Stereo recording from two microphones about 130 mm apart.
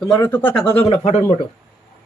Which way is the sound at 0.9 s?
55° left (ahead or behind).